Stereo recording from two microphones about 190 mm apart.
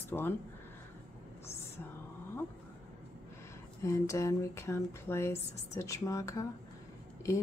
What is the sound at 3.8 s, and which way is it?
Speech, 15° left (ahead or behind).